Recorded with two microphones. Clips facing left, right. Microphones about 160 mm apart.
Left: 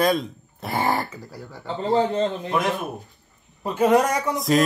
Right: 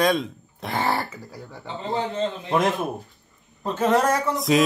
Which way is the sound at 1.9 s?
35° left (ahead or behind).